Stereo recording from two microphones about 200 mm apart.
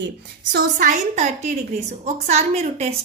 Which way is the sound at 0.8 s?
35° right (ahead or behind).